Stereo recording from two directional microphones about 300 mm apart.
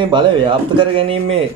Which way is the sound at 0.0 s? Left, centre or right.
Centre.